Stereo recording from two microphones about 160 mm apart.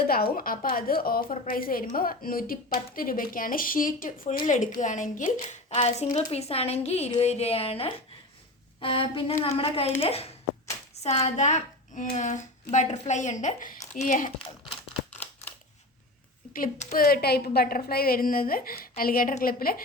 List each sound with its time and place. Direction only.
0.0 s a woman's voice: 70° left (ahead or behind); by 5.5 s 55° left (ahead or behind)
5.7 s a woman's voice: 35° left (ahead or behind)
14.3 s crumpling: 35° left (ahead or behind)
15.2 s scissors: 10° left (ahead or behind)
16.7 s a woman's voice: 45° left (ahead or behind)
17.0 s a woman's voice: 70° left (ahead or behind)